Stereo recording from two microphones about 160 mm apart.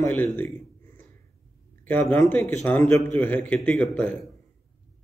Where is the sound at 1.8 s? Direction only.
10° left (ahead or behind).